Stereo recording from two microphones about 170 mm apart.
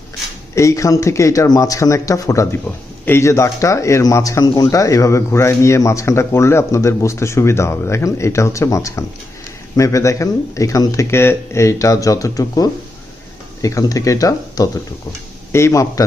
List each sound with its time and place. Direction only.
0.5 s speech: 20° left (ahead or behind)